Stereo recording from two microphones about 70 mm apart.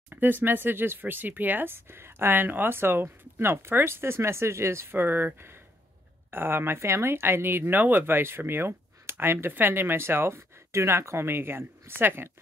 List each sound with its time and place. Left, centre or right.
0.1 s speech: right